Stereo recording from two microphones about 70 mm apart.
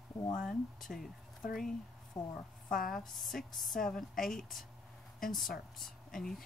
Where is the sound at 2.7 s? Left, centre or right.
Centre.